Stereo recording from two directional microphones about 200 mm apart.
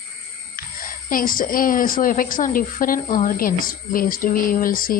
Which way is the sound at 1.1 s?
45° left (ahead or behind).